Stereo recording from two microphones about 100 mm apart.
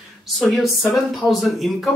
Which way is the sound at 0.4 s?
Centre (ahead or behind).